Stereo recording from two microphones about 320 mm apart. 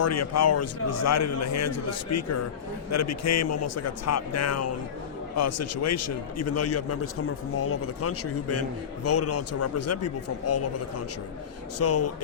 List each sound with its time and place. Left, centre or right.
0.0 s a man's voice: left
11.8 s a man's voice: left